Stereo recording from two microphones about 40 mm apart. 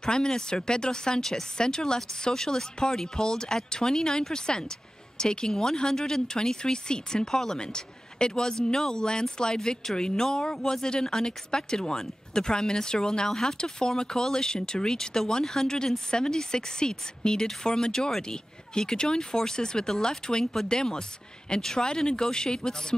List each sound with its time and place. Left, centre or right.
0.0 s speech: centre